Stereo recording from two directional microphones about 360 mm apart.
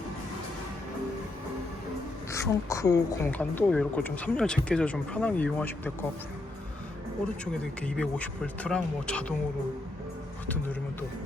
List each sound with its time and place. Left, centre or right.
2.3 s a woman's voice: centre
7.4 s a woman's voice: centre